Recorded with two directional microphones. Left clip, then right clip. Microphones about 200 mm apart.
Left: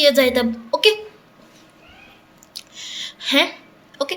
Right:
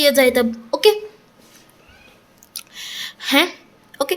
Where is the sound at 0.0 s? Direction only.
40° right (ahead or behind).